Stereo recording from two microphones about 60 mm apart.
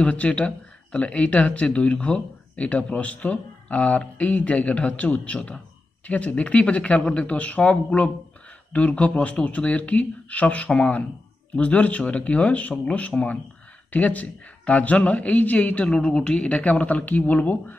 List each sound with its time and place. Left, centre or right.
0.0 s speech: left
15.9 s speech: centre; by 17.7 s left